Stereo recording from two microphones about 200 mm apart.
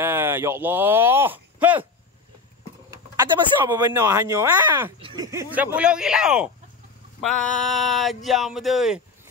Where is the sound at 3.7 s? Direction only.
15° right (ahead or behind).